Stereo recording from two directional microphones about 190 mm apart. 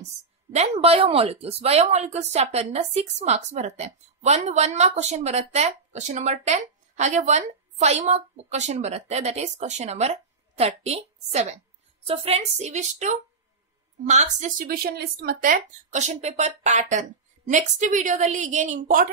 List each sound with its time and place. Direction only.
0.5 s a woman's voice: 35° right (ahead or behind)